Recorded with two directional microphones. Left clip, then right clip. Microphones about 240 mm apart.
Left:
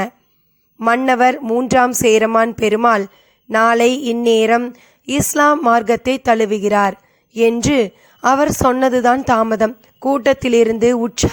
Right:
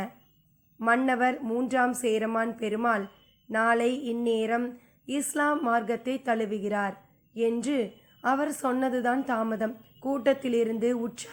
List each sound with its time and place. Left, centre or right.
0.8 s a woman's voice: left